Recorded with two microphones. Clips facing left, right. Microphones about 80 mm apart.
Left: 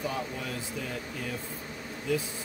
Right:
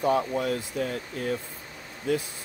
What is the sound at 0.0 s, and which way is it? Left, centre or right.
Speech, right.